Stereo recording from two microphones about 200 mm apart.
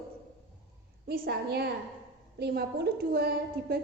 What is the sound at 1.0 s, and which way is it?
A woman's voice, 50° right (ahead or behind).